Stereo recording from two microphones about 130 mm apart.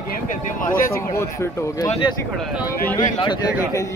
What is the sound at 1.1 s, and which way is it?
Speech, 20° left (ahead or behind).